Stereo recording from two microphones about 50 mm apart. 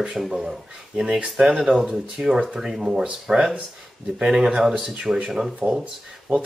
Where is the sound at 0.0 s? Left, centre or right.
Centre.